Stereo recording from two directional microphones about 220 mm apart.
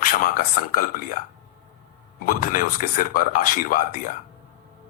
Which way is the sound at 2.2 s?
40° left (ahead or behind).